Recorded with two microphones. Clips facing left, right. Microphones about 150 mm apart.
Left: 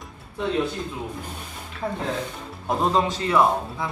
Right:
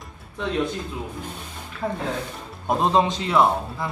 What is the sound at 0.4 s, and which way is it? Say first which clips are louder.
Speech: left 2 dB; 5° left (ahead or behind).